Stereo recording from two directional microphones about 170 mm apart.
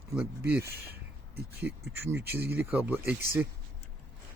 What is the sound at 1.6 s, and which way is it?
Speech, 15° right (ahead or behind).